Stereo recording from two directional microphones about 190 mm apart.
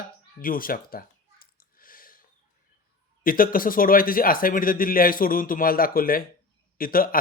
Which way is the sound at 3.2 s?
50° left (ahead or behind).